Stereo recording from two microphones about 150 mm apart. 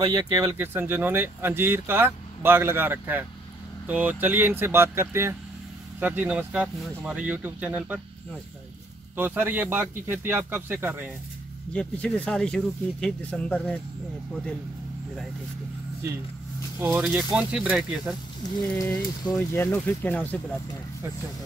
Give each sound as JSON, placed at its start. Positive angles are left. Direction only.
{"t": 0.0, "sound": "speech", "side_deg": -30}
{"t": 0.6, "sound": "speech", "side_deg": -15}
{"t": 9.1, "sound": "speech", "side_deg": -10}
{"t": 11.7, "sound": "speech", "side_deg": 5}
{"t": 16.8, "sound": "speech", "side_deg": -10}
{"t": 18.8, "sound": "speech", "side_deg": 20}